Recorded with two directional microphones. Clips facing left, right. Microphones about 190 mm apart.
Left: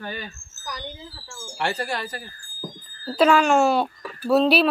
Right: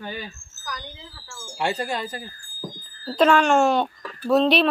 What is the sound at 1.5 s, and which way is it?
Speech, 15° right (ahead or behind).